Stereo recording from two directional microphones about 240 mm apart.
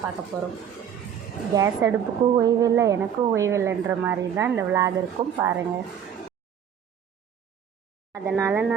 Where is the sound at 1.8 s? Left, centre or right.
Centre.